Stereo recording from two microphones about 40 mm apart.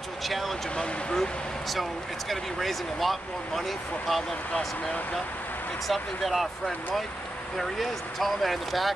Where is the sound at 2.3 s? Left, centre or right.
Centre.